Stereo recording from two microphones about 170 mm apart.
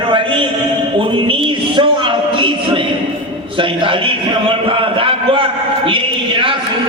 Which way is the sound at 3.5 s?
30° right (ahead or behind).